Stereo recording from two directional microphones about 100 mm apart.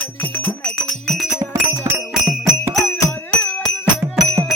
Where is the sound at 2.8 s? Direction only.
10° left (ahead or behind).